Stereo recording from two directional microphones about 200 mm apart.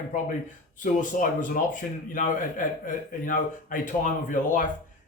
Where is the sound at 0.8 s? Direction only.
40° left (ahead or behind).